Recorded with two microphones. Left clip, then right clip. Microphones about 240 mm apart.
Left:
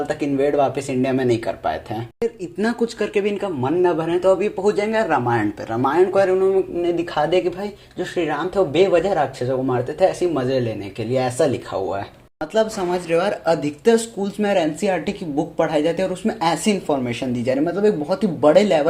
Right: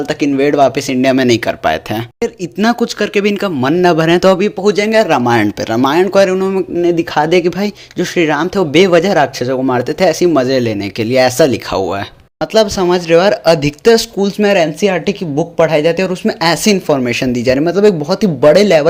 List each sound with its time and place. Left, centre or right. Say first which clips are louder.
0.1 s speech: right 8 dB; right
4.9 s speech: right 8 dB; right